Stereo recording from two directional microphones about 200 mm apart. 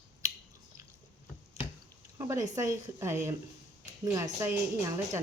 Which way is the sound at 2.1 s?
15° right (ahead or behind).